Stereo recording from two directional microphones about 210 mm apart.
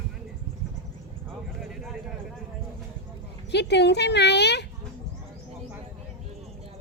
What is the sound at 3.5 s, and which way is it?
Speech, 55° left (ahead or behind).